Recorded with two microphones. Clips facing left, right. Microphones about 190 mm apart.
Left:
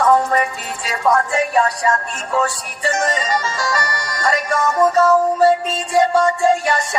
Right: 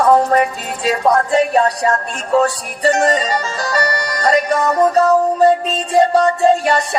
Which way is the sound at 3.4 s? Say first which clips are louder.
Right 3 dB; 35° right (ahead or behind).